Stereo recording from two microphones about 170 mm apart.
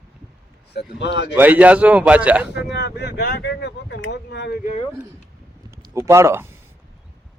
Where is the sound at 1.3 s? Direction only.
10° right (ahead or behind).